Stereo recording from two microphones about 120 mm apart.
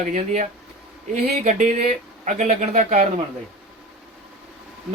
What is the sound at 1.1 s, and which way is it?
Speech, 85° right.